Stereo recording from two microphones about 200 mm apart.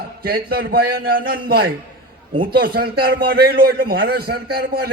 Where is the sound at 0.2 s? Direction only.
50° right (ahead or behind).